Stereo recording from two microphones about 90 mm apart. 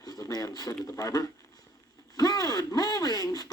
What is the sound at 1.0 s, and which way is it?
Speech, 35° left (ahead or behind).